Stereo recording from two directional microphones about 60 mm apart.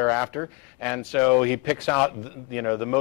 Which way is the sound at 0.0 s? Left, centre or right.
Centre.